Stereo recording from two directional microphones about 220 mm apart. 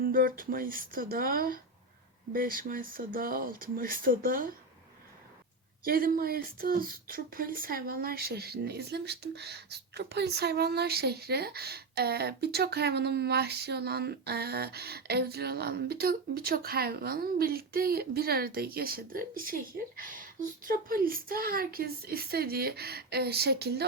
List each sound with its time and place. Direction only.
0.0 s speech: 40° right (ahead or behind)
5.8 s speech: 40° right (ahead or behind)